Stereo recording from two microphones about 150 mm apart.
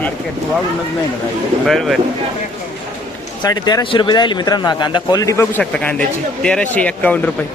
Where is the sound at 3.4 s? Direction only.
25° left (ahead or behind).